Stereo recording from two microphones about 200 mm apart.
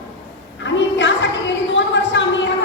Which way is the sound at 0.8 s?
65° left (ahead or behind).